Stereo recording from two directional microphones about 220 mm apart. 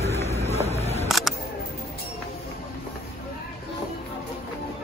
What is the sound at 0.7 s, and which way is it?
Single-lens reflex camera, 30° left (ahead or behind).